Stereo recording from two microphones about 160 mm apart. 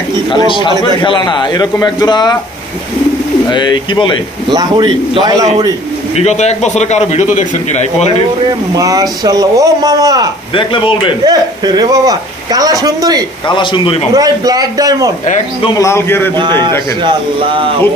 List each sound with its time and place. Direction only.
0.3 s speech: 30° left (ahead or behind)
3.4 s speech: 30° left (ahead or behind)
4.5 s a man's voice: 25° right (ahead or behind)
6.2 s a man's voice: 45° left (ahead or behind)
8.7 s a man's voice: 20° right (ahead or behind)
10.5 s speech: 30° left (ahead or behind)
11.2 s a man's voice: 25° right (ahead or behind)
13.5 s speech: 30° left (ahead or behind)
14.1 s a man's voice: 25° right (ahead or behind)
15.8 s a man's voice: 15° left (ahead or behind)
16.3 s a man's voice: 30° right (ahead or behind)